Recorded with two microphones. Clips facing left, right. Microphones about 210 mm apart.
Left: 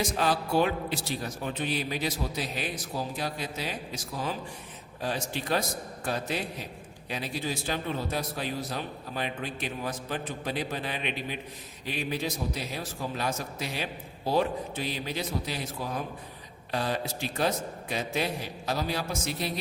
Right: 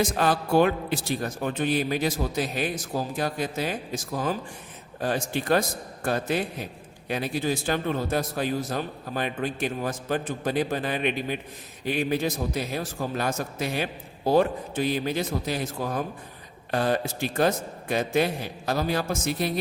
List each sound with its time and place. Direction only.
0.0 s a man's voice: 50° right (ahead or behind)